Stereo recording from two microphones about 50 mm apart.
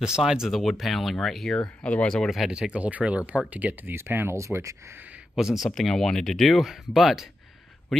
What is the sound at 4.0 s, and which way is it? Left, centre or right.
Speech, right.